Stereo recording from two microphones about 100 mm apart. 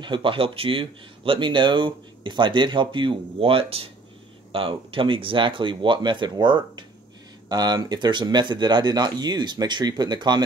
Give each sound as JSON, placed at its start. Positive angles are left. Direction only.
{"t": 0.0, "sound": "speech", "side_deg": -55}